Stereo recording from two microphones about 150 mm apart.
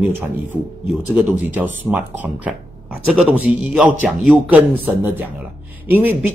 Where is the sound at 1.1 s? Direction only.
10° right (ahead or behind).